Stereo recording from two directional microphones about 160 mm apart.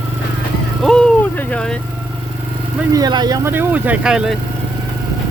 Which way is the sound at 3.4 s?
10° right (ahead or behind).